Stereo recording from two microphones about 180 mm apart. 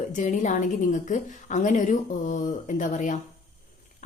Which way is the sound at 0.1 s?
45° left (ahead or behind).